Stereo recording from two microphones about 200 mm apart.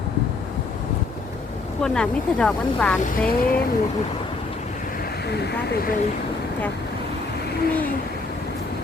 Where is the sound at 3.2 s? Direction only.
45° left (ahead or behind).